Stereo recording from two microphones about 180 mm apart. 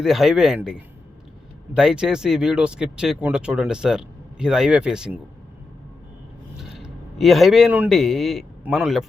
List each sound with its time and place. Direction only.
0.0 s speech: centre (ahead or behind)
6.6 s a man's voice: centre (ahead or behind)